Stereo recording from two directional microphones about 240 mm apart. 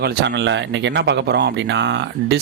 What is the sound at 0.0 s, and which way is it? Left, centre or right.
Speech, right.